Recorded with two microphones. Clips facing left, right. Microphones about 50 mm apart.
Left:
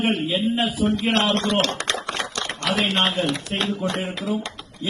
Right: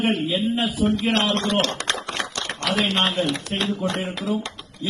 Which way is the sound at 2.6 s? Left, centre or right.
Left.